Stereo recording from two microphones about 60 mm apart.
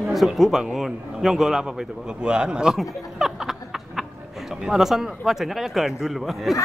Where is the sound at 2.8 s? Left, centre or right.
Centre.